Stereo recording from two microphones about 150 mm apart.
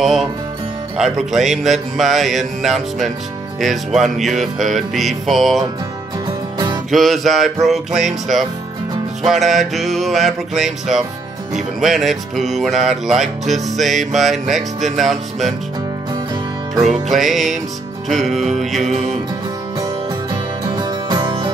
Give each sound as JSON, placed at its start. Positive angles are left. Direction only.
{"t": 0.0, "sound": "music", "side_deg": 0}
{"t": 6.9, "sound": "music", "side_deg": 0}
{"t": 17.1, "sound": "music", "side_deg": 0}
{"t": 19.8, "sound": "music", "side_deg": -25}